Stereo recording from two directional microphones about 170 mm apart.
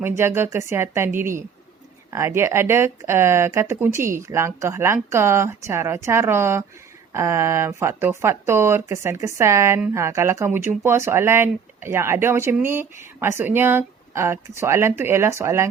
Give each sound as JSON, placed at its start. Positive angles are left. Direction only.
{"t": 0.0, "sound": "speech", "side_deg": -15}